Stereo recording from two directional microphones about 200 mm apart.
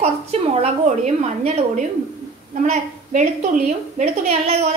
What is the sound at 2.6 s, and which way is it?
A woman's voice, 35° right (ahead or behind).